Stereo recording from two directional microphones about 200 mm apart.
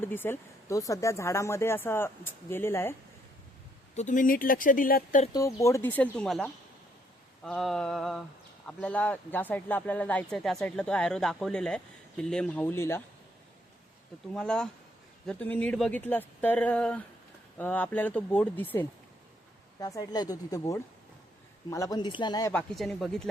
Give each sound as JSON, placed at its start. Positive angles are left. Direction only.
{"t": 0.0, "sound": "speech", "side_deg": 10}
{"t": 3.9, "sound": "speech", "side_deg": 40}
{"t": 5.3, "sound": "speech", "side_deg": 15}
{"t": 14.3, "sound": "speech", "side_deg": 5}
{"t": 22.5, "sound": "speech", "side_deg": 0}